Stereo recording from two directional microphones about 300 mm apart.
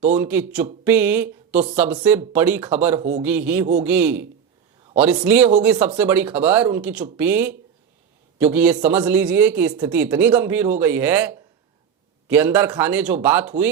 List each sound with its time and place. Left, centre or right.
0.2 s speech: centre
3.0 s a man's voice: right
3.2 s speech: centre